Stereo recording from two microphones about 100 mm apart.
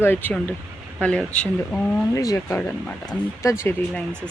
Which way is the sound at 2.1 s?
35° left (ahead or behind).